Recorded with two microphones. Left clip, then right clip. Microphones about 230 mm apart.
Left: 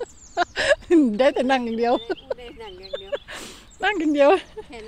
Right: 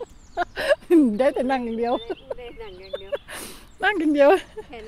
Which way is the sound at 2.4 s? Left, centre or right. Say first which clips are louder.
Even; left.